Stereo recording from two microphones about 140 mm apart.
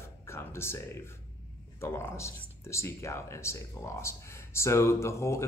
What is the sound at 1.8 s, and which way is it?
Speech, 20° left (ahead or behind).